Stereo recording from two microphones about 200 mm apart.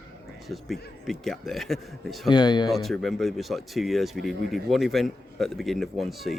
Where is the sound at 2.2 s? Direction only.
20° left (ahead or behind).